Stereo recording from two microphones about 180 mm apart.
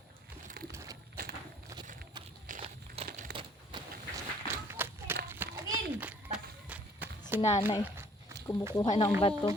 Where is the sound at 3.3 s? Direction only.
30° right (ahead or behind).